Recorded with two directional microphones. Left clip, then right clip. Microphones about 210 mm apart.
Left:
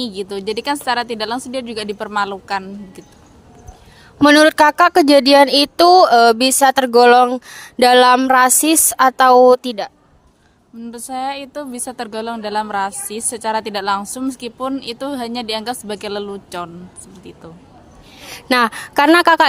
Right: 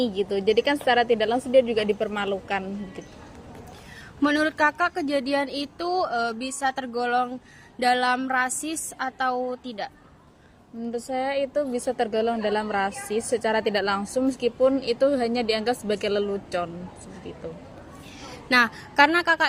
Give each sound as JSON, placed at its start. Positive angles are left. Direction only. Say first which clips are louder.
{"t": 0.1, "sound": "a woman's voice", "louder": "even", "side_deg": 50}
{"t": 4.2, "sound": "a woman's voice", "louder": "left 12 dB", "side_deg": 55}
{"t": 10.9, "sound": "a woman's voice", "louder": "left 3 dB", "side_deg": 45}
{"t": 18.4, "sound": "a woman's voice", "louder": "left 5 dB", "side_deg": 45}